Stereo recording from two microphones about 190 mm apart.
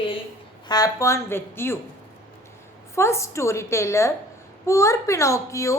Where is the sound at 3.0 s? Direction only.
15° left (ahead or behind).